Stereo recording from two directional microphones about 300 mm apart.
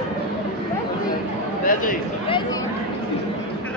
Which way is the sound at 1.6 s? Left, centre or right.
Left.